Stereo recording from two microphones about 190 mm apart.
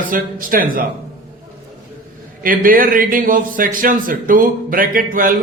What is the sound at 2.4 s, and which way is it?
Speech, 45° right (ahead or behind).